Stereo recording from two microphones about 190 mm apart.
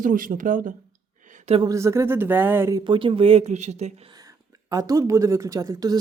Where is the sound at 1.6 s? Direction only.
15° right (ahead or behind); by 3.9 s 35° right (ahead or behind).